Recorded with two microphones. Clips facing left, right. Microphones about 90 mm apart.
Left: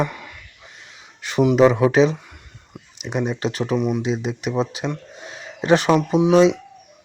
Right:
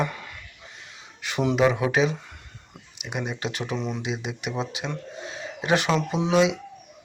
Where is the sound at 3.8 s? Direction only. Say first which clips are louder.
Left 9 dB; 15° left (ahead or behind).